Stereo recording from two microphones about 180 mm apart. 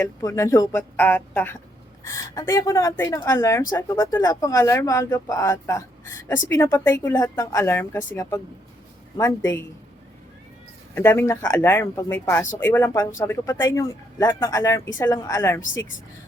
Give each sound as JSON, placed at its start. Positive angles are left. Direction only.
{"t": 0.0, "sound": "speech", "side_deg": 15}
{"t": 10.9, "sound": "speech", "side_deg": 15}